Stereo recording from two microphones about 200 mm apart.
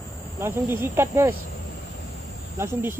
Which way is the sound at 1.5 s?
60° left (ahead or behind).